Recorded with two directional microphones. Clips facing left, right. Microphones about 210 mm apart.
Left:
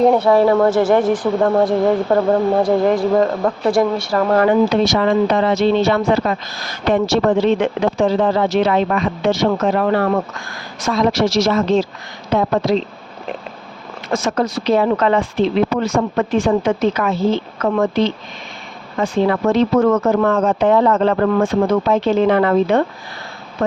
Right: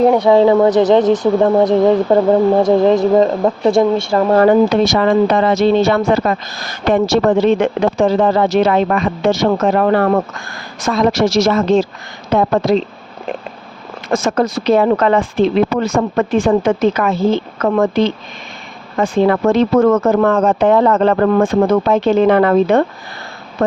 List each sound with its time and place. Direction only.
0.0 s a woman's voice: 10° right (ahead or behind)
4.4 s speech: 50° right (ahead or behind)
14.1 s speech: 45° right (ahead or behind)